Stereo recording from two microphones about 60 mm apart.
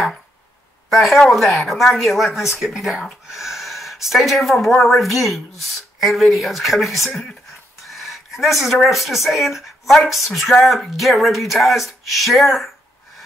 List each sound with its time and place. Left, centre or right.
0.8 s speech: centre